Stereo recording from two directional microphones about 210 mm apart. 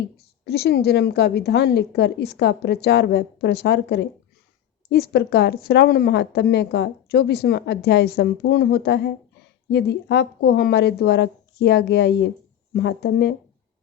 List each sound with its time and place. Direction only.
0.4 s speech: 50° left (ahead or behind)